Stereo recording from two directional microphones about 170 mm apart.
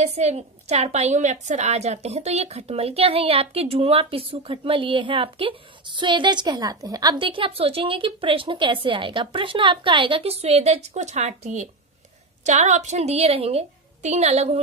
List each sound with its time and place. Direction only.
0.0 s a woman's voice: 40° right (ahead or behind)